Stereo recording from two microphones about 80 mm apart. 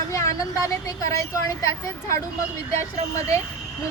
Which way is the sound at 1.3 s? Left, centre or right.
Left.